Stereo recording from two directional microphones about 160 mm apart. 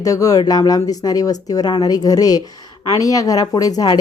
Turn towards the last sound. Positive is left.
turn(degrees=25)  # may be behind; listen again after turning